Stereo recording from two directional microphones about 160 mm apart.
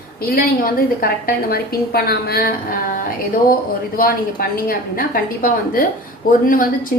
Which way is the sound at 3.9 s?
65° left (ahead or behind).